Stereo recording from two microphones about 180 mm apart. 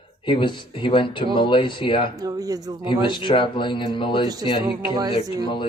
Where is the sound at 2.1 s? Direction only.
20° right (ahead or behind).